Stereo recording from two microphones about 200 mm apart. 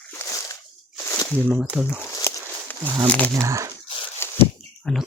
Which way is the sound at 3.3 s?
15° right (ahead or behind).